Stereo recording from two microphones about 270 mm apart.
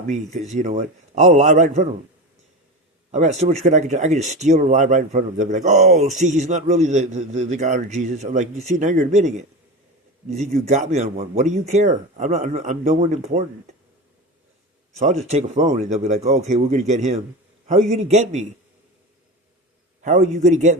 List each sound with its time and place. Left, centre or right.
0.3 s speech: right
3.1 s speech: right
15.3 s speech: right
20.0 s speech: right